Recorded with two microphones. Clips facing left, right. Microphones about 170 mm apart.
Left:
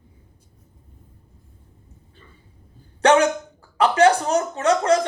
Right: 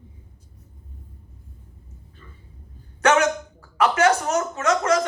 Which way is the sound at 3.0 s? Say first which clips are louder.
Left 3 dB; 30° left (ahead or behind).